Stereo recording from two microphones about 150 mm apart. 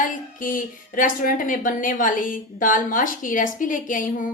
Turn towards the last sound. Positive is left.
turn(degrees=65)  # may be behind; listen again after turning